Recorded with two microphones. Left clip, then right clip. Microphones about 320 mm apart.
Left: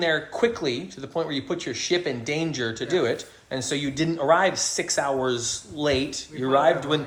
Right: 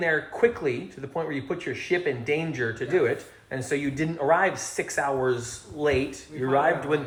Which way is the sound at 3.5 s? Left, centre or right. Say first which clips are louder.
Left 1 dB; left.